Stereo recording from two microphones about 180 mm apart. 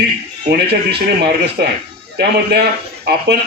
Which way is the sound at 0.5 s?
65° right (ahead or behind).